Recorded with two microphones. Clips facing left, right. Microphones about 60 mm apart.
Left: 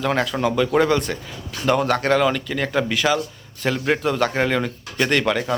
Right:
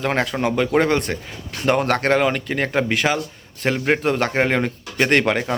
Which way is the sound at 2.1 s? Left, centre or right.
Right.